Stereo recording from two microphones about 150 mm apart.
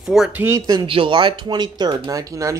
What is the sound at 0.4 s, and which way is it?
Speech, 20° right (ahead or behind).